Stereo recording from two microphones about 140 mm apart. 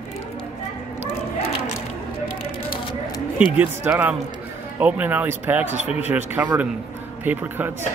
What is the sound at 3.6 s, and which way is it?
Speech, 15° right (ahead or behind).